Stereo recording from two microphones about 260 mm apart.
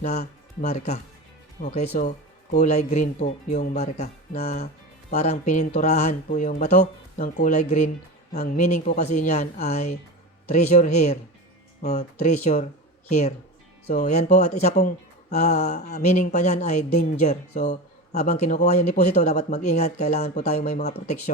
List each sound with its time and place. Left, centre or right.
0.0 s speech: left
15.6 s speech: left